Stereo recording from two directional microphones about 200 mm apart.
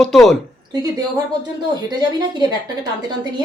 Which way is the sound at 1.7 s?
20° right (ahead or behind).